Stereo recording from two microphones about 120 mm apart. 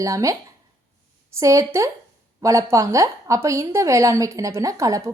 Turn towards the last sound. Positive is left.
turn(degrees=-25)  # may be behind; listen again after turning